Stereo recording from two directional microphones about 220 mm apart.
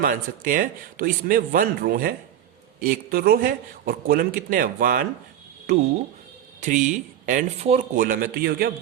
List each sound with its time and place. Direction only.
0.0 s speech: 40° right (ahead or behind)
6.6 s speech: 35° right (ahead or behind)